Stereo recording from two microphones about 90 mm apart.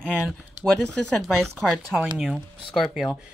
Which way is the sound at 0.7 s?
5° left (ahead or behind).